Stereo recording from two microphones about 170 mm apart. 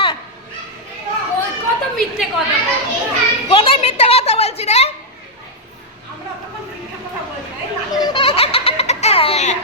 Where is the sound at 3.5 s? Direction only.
30° left (ahead or behind).